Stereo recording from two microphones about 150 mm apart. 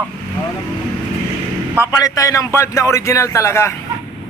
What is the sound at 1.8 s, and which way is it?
Speech, 20° left (ahead or behind).